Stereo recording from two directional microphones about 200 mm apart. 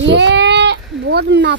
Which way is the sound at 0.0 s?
60° right (ahead or behind).